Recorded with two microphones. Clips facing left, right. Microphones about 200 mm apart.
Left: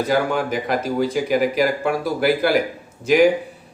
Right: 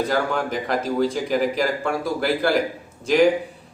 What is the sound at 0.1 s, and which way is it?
A man's voice, 5° left (ahead or behind).